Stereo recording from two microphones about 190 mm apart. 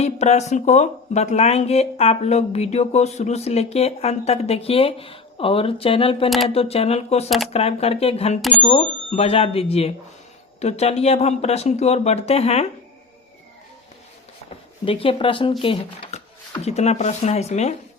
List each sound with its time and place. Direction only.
0.0 s speech: 35° left (ahead or behind)
8.4 s speech: centre (ahead or behind)
8.6 s speech: 35° left (ahead or behind)
14.8 s speech: 30° left (ahead or behind)